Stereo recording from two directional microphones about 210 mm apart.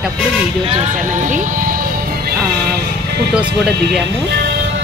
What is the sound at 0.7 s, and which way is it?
Music, 30° right (ahead or behind).